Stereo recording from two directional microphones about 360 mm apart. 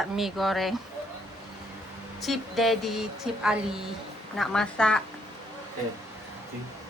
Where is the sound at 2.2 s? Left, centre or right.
Centre.